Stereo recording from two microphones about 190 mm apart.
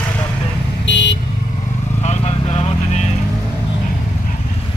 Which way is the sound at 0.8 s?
70° left (ahead or behind).